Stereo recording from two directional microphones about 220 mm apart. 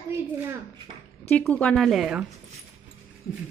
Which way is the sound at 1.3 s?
5° left (ahead or behind).